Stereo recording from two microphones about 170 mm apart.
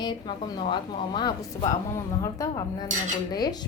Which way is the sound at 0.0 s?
25° left (ahead or behind).